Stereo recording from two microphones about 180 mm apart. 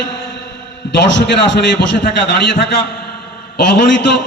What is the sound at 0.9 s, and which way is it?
Speech, 75° left (ahead or behind).